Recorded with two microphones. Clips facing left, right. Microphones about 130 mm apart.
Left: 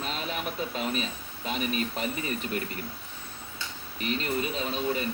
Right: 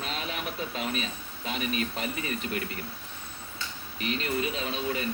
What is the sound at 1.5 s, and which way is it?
Speech, 40° left (ahead or behind).